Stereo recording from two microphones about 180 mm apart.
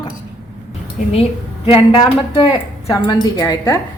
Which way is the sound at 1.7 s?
25° left (ahead or behind).